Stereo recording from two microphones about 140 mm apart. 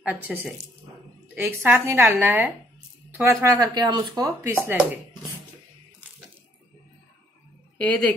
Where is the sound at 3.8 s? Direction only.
30° right (ahead or behind).